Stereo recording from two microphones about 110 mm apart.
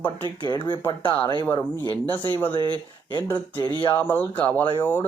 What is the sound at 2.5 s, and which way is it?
Speech, 45° right (ahead or behind).